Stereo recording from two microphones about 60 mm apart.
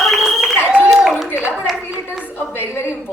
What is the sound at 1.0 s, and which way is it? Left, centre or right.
Clapping, centre.